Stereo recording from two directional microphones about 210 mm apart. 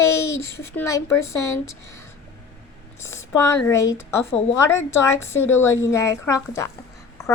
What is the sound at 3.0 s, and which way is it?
A woman's voice, 15° left (ahead or behind).